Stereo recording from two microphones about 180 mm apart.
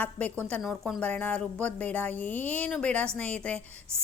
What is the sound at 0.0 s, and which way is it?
A woman's voice, 10° left (ahead or behind).